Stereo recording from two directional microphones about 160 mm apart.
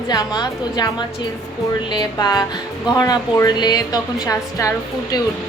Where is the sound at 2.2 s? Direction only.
25° left (ahead or behind).